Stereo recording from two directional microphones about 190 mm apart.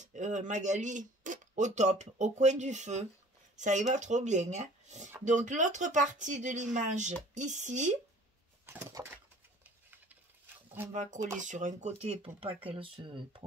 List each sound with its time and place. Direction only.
0.0 s speech: 40° right (ahead or behind)
8.6 s a sound: 15° right (ahead or behind)
10.9 s speech: 40° right (ahead or behind)